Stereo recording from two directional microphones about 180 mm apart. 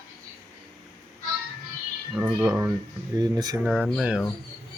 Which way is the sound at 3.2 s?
20° right (ahead or behind).